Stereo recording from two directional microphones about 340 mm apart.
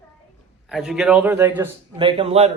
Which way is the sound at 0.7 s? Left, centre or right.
Centre.